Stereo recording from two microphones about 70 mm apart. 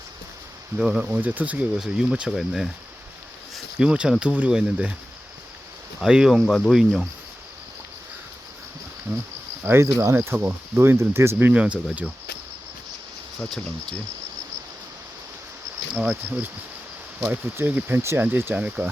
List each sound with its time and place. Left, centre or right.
0.8 s speech: centre
1.0 s speech: right
1.7 s speech: centre
3.8 s speech: centre
6.0 s speech: centre
9.6 s speech: right
11.6 s speech: centre
16.0 s speech: centre
17.2 s speech: right
17.9 s speech: right